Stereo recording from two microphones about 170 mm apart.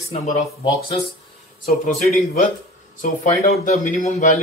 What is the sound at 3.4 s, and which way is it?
Speech, 55° left (ahead or behind).